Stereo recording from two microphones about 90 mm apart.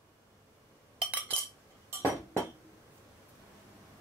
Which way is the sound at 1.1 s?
20° right (ahead or behind).